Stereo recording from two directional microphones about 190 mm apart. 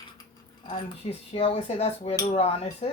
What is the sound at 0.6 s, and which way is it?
Speech, 25° left (ahead or behind).